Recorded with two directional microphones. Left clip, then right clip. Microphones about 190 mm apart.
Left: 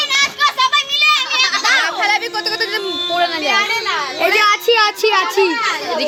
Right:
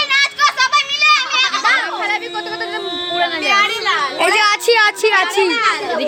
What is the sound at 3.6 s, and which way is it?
Children playing, 45° right (ahead or behind).